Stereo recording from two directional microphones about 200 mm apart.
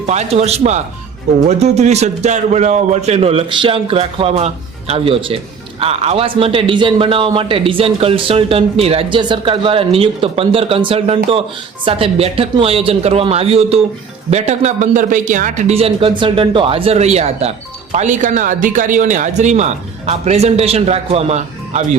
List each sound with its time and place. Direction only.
0.0 s a man's voice: 35° right (ahead or behind)